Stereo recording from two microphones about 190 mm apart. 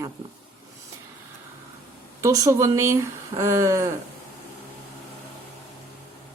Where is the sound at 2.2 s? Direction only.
15° right (ahead or behind).